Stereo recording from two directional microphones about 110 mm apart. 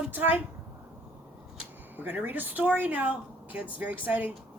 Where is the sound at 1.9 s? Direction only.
15° right (ahead or behind).